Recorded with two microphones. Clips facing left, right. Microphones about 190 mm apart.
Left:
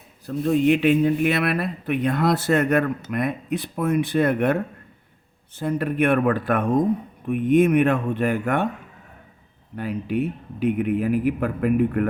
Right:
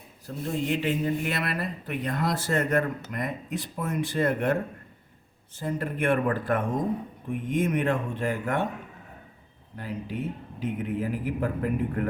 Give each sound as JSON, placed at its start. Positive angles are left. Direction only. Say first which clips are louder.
{"t": 0.4, "sound": "speech", "louder": "left 9 dB", "side_deg": 65}
{"t": 5.5, "sound": "speech", "louder": "left 7 dB", "side_deg": 65}
{"t": 9.7, "sound": "speech", "louder": "left 8 dB", "side_deg": 65}